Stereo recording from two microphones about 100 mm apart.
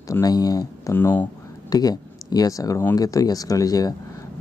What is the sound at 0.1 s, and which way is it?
Speech, 40° left (ahead or behind).